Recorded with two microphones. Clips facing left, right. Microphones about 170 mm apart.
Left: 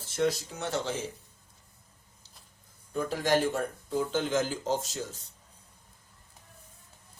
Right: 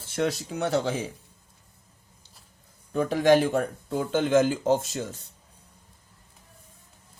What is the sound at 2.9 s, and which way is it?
Speech, 65° right (ahead or behind).